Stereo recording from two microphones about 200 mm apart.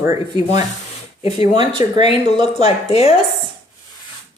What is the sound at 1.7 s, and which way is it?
Speech, 30° left (ahead or behind).